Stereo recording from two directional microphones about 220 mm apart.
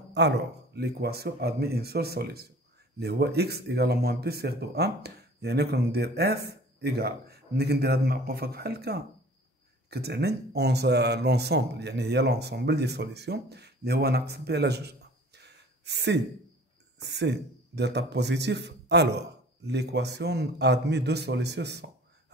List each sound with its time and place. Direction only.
0.1 s speech: 50° right (ahead or behind)